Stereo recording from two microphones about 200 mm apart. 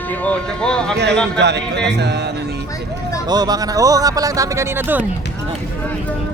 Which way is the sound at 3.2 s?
20° right (ahead or behind).